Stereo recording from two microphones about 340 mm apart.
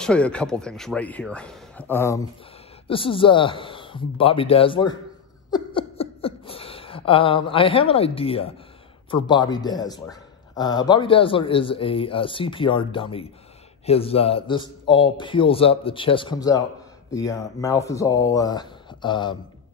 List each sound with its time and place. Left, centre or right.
0.0 s a man's voice: centre
5.5 s a sound: centre
9.1 s a man's voice: centre